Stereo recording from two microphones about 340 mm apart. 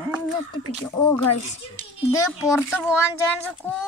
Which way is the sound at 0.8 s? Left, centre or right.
Centre.